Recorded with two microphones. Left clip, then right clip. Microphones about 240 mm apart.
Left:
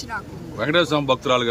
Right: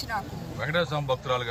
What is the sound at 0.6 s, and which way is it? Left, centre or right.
Speech, left.